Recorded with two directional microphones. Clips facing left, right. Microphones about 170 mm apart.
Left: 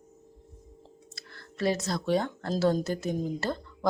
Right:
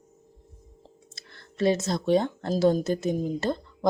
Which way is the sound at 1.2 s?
25° right (ahead or behind).